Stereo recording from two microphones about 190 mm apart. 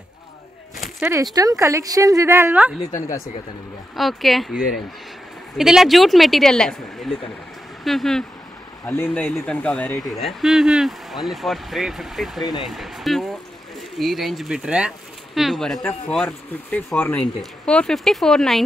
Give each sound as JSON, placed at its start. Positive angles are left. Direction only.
{"t": 0.7, "sound": "a sound", "side_deg": 0}
{"t": 1.1, "sound": "speech", "side_deg": -20}
{"t": 3.9, "sound": "speech", "side_deg": 0}